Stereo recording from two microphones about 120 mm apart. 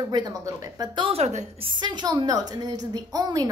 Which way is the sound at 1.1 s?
70° right (ahead or behind).